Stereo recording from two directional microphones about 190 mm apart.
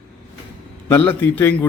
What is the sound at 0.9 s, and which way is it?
Speech, 10° left (ahead or behind).